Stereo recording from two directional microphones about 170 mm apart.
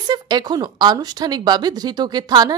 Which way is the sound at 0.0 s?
25° right (ahead or behind).